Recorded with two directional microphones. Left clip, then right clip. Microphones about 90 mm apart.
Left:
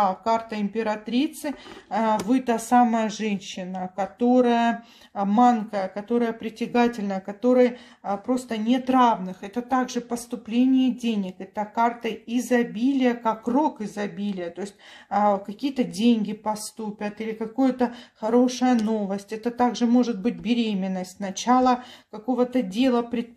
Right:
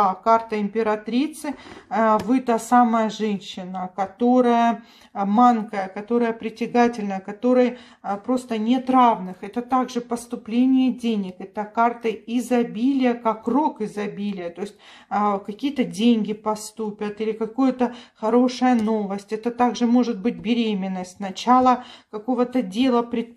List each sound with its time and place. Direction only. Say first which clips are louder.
0.0 s speech: right 4 dB; 5° left (ahead or behind)